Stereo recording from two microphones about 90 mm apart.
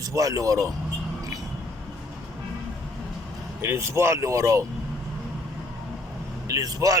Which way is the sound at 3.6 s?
30° right (ahead or behind).